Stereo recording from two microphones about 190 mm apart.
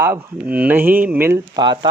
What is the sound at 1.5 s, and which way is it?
Speech, 25° right (ahead or behind).